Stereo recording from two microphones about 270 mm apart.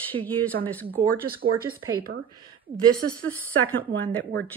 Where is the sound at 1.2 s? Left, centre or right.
Right.